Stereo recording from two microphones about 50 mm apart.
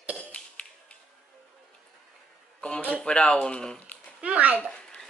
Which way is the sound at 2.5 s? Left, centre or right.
Centre.